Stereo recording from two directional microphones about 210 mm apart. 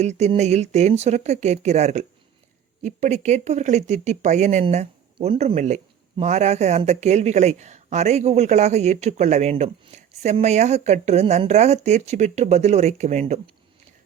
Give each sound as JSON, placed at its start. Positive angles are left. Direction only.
{"t": 0.0, "sound": "speech", "side_deg": -30}